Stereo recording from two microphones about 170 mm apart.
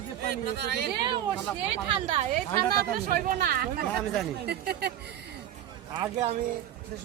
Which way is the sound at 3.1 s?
60° right (ahead or behind).